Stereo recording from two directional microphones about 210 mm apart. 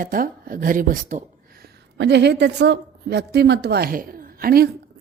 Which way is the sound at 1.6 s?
55° right (ahead or behind).